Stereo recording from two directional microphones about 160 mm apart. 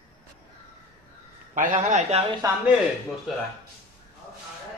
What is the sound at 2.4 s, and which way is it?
Speech, 20° right (ahead or behind).